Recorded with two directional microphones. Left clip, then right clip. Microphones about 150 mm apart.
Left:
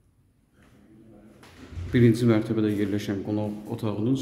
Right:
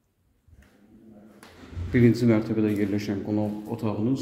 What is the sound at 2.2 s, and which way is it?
A man's voice, 25° left (ahead or behind).